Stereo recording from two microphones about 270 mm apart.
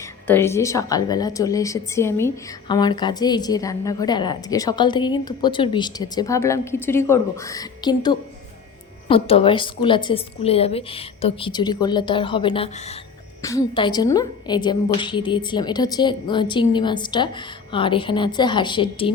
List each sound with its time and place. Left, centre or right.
0.3 s a woman's voice: centre